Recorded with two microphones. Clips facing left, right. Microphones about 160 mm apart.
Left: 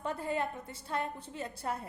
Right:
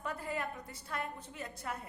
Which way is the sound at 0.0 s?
30° left (ahead or behind).